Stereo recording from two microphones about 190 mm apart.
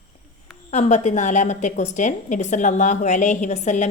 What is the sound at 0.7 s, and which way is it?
A woman's voice, 35° left (ahead or behind).